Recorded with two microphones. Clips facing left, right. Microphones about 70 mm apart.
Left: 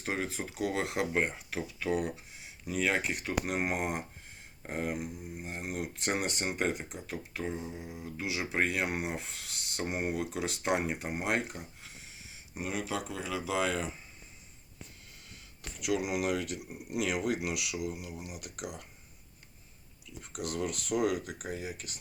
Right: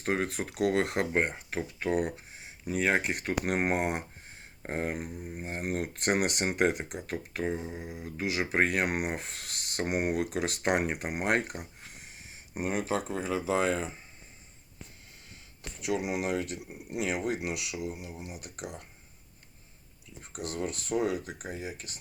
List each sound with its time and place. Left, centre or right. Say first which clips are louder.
0.0 s speech: right 4 dB; right
3.8 s speech: right 3 dB; right
4.6 s speech: right 2 dB; right
5.5 s speech: right 5 dB; right
15.9 s speech: even; right
20.1 s speech: even; right